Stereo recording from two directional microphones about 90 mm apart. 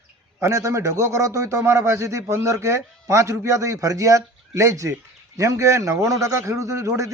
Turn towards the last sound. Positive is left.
turn(degrees=-35)  # may be behind; listen again after turning